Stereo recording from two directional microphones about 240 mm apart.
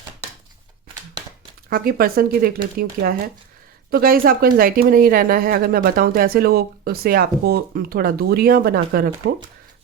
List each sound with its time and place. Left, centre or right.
1.7 s speech: right